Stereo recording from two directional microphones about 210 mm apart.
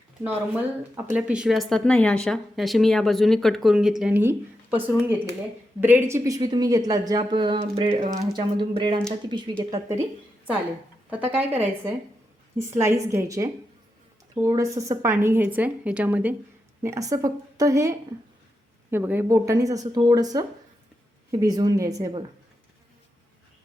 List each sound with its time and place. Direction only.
1.0 s a woman's voice: 5° right (ahead or behind)
11.1 s a woman's voice: 10° right (ahead or behind)
14.5 s a woman's voice: 15° right (ahead or behind)